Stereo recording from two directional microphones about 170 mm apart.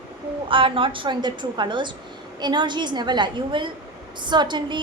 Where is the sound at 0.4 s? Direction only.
30° right (ahead or behind).